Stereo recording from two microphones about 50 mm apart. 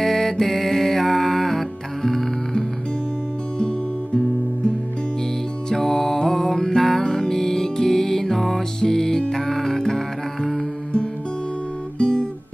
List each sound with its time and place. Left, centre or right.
0.0 s music: centre
3.5 s music: centre
5.7 s music: centre
12.0 s guitar: centre